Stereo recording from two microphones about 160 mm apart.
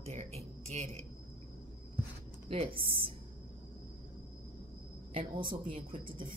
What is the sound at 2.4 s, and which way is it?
Speech, 35° right (ahead or behind).